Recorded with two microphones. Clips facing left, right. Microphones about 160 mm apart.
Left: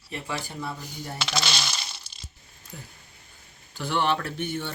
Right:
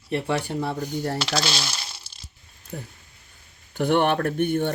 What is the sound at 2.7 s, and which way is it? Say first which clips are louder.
Speech: right 8 dB; 60° right (ahead or behind).